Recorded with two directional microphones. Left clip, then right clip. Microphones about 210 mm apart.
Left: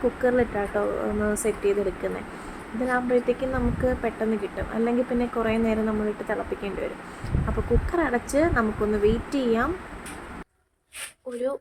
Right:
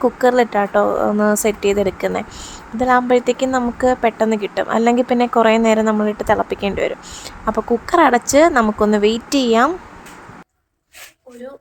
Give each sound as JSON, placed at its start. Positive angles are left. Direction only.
{"t": 0.2, "sound": "speech", "side_deg": -40}